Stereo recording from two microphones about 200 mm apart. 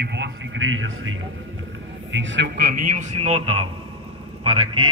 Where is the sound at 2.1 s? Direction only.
65° right (ahead or behind).